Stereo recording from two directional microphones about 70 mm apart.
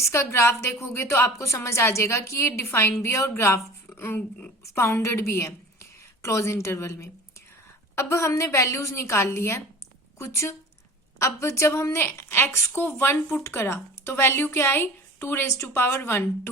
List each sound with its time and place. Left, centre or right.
0.0 s a woman's voice: left
3.9 s a sound: left
4.2 s a woman's voice: centre
4.6 s a woman's voice: left